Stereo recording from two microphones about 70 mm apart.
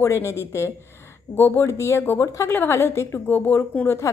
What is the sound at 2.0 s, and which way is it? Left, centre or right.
Speech, left.